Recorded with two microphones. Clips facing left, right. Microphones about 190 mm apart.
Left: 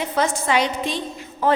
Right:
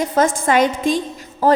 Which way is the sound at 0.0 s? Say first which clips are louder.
Right 5 dB; 45° right (ahead or behind).